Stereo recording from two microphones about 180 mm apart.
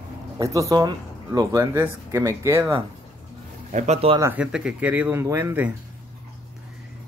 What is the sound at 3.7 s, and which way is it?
Speech, 40° right (ahead or behind).